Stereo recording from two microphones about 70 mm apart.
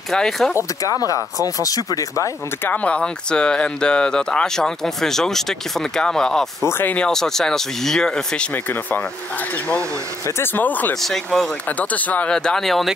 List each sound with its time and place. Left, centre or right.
0.1 s speech: centre
0.6 s speech: left
2.6 s speech: left
6.6 s speech: left
7.0 s speech: centre
10.4 s speech: left
12.3 s speech: centre